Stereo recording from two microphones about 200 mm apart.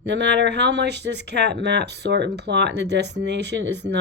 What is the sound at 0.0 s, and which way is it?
Speech, 60° right (ahead or behind).